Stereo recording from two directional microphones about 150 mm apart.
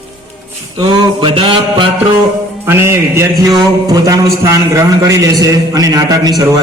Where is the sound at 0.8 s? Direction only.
35° right (ahead or behind).